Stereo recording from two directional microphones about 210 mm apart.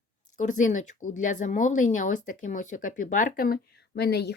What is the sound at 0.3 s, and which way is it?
Speech, 35° left (ahead or behind).